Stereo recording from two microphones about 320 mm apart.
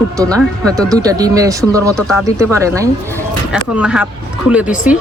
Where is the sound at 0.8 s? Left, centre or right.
Centre.